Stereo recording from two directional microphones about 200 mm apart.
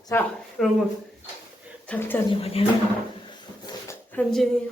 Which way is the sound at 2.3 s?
30° left (ahead or behind).